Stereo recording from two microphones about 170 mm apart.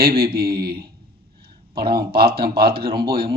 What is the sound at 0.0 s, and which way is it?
Speech, 65° right (ahead or behind).